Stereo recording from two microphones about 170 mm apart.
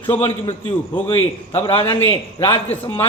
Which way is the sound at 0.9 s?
30° left (ahead or behind).